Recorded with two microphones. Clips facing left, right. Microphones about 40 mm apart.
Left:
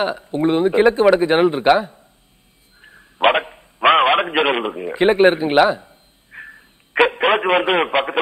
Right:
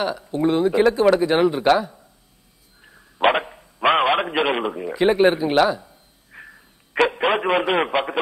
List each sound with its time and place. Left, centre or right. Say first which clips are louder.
0.0 s a man's voice: left 2 dB; left
2.8 s dog: left 2 dB; left
5.0 s a man's voice: left 3 dB; left